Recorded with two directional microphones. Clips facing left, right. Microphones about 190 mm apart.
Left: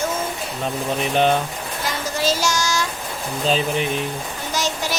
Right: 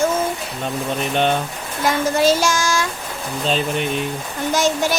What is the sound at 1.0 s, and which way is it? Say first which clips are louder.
Mantra: left 1 dB; centre (ahead or behind).